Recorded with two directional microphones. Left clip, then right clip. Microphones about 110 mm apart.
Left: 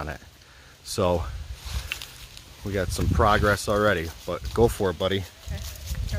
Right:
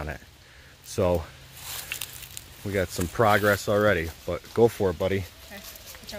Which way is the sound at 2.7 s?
15° right (ahead or behind).